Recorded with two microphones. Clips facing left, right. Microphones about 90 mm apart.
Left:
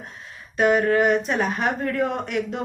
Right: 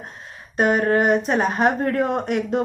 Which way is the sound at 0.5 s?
40° right (ahead or behind).